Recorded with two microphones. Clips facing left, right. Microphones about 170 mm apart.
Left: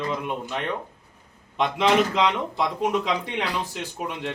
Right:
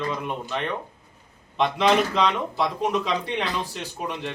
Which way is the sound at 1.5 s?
15° left (ahead or behind).